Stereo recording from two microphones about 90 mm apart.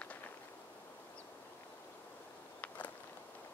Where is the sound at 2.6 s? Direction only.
15° left (ahead or behind).